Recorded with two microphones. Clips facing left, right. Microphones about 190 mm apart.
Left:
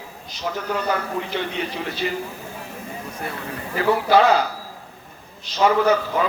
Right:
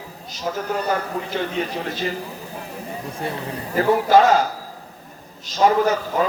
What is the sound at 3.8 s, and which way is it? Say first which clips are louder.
Speech: right 2 dB; 45° right (ahead or behind).